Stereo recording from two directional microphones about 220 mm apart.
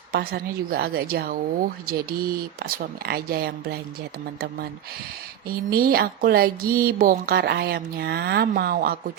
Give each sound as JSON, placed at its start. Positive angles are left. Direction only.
{"t": 0.1, "sound": "speech", "side_deg": -45}
{"t": 5.5, "sound": "speech", "side_deg": -45}